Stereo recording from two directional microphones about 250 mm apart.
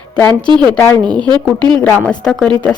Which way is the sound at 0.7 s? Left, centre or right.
Centre.